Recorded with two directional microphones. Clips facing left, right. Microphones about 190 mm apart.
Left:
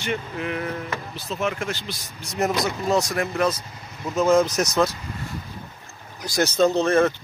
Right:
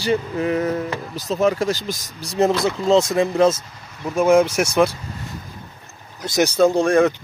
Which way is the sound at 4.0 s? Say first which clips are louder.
Right 3 dB; 15° right (ahead or behind).